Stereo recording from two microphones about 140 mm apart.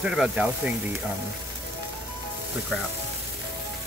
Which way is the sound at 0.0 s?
5° right (ahead or behind).